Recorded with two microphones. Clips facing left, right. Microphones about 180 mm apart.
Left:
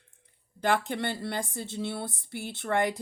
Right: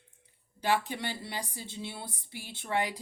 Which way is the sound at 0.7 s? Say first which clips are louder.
Even; 55° left (ahead or behind).